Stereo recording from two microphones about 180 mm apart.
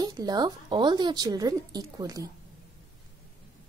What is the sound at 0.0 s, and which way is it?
A woman's voice, 20° right (ahead or behind).